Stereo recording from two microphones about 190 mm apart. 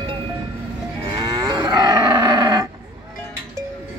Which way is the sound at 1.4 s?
20° right (ahead or behind).